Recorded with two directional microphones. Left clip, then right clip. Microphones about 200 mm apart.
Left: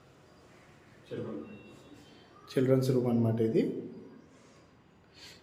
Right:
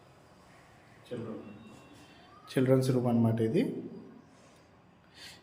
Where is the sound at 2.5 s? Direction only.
15° right (ahead or behind).